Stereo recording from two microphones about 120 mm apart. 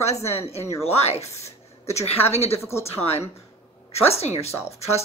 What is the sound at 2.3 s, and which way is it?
Speech, 60° left (ahead or behind).